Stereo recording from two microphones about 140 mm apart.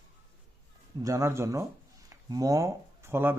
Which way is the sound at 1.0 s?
20° right (ahead or behind).